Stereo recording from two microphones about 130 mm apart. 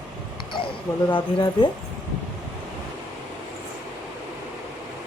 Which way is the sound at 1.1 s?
40° left (ahead or behind).